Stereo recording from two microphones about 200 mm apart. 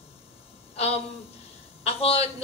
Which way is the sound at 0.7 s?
30° left (ahead or behind).